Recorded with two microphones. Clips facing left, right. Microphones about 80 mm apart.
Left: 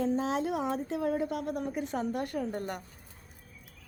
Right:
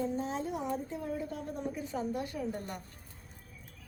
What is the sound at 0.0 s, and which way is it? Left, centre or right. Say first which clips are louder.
A woman's voice: left 5 dB; left.